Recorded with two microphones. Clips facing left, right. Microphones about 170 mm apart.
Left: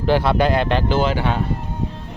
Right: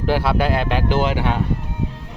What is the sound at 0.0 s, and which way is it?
Speech, 5° right (ahead or behind).